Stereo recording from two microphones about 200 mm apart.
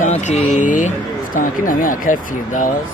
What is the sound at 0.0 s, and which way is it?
Speech, 35° left (ahead or behind).